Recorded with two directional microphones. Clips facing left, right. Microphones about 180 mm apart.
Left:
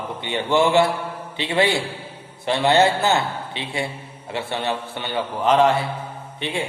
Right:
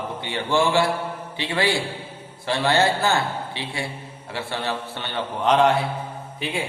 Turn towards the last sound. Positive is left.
turn(degrees=-5)  # may be behind; listen again after turning